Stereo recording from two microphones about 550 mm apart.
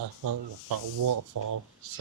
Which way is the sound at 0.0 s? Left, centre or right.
Right.